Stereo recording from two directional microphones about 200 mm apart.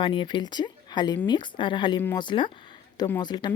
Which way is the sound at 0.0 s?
25° left (ahead or behind).